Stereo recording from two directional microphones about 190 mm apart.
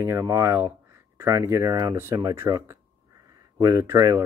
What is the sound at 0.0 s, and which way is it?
Speech, 15° right (ahead or behind).